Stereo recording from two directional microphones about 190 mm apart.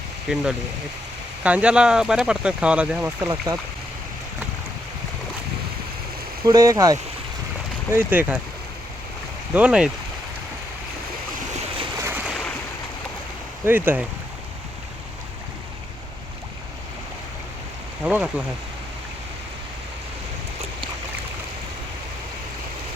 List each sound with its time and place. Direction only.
0.3 s speech: 5° right (ahead or behind)
1.5 s speech: 5° right (ahead or behind)
6.4 s speech: 15° right (ahead or behind)
9.6 s speech: 5° right (ahead or behind)
11.9 s waves: 15° right (ahead or behind)
12.2 s ocean: centre (ahead or behind)
13.7 s speech: 10° right (ahead or behind)
18.0 s speech: 5° right (ahead or behind)